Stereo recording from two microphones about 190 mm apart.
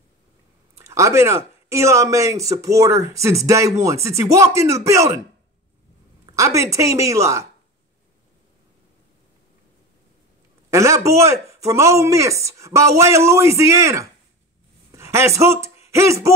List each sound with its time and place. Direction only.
0.7 s speech: 15° right (ahead or behind)
6.3 s speech: 15° right (ahead or behind)
10.7 s speech: 15° right (ahead or behind)